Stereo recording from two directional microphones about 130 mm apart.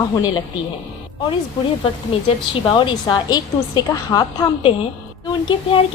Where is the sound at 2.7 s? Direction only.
35° left (ahead or behind).